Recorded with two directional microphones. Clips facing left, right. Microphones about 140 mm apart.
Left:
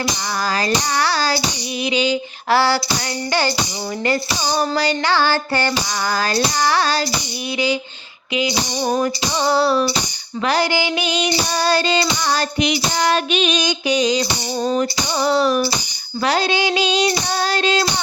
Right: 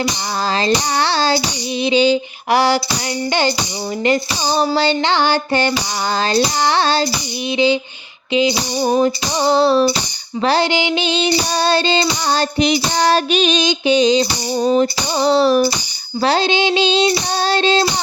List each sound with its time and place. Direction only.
0.5 s child singing: 25° right (ahead or behind)
2.5 s a sound: 15° right (ahead or behind)
4.0 s child singing: 20° right (ahead or behind)
8.3 s female singing: 25° right (ahead or behind)
9.0 s child singing: 20° right (ahead or behind)